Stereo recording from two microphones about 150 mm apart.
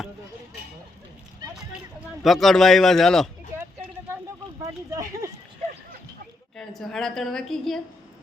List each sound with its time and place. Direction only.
2.2 s a woman's voice: centre (ahead or behind)
3.5 s a sound: 15° right (ahead or behind)
6.6 s a woman's voice: centre (ahead or behind)